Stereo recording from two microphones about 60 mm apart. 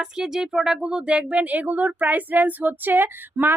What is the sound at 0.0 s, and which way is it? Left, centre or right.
Speech, centre.